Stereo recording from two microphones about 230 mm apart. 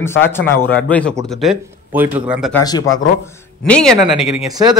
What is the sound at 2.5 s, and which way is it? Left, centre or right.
Speech, centre.